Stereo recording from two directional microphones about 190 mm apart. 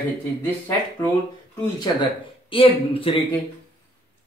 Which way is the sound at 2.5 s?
30° left (ahead or behind).